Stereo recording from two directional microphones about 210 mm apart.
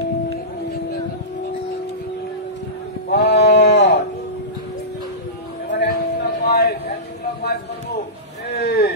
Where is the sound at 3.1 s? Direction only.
55° left (ahead or behind).